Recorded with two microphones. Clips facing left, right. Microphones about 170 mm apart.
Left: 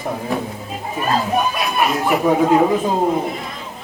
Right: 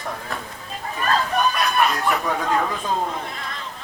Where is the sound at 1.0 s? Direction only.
15° left (ahead or behind).